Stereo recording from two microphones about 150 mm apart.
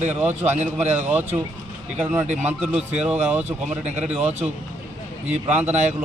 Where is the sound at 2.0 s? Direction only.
15° right (ahead or behind).